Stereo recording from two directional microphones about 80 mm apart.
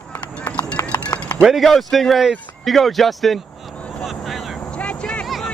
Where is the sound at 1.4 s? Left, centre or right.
Centre.